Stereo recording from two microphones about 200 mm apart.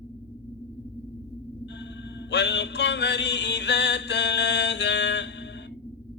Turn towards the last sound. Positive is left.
turn(degrees=60)  # may be behind; listen again after turning